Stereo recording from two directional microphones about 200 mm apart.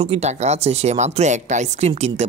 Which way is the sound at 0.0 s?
30° right (ahead or behind).